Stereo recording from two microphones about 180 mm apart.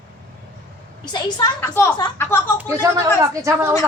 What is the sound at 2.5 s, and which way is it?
A woman's voice, 15° right (ahead or behind).